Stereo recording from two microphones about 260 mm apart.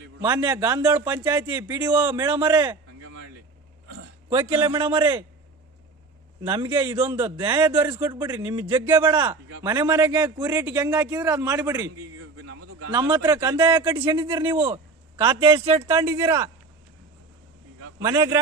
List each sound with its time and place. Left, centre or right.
0.2 s a man's voice: centre
4.3 s a man's voice: centre
6.5 s a man's voice: centre
9.0 s a man's voice: centre
12.9 s speech: centre
15.9 s a man's voice: centre
18.0 s a man's voice: centre